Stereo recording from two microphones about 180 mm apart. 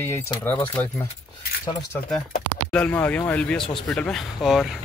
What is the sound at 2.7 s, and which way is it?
Speech, 10° left (ahead or behind).